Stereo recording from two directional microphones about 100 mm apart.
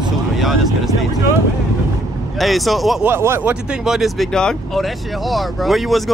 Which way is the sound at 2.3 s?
Centre (ahead or behind).